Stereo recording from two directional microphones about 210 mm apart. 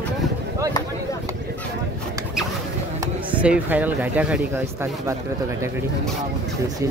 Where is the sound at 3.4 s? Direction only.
5° right (ahead or behind).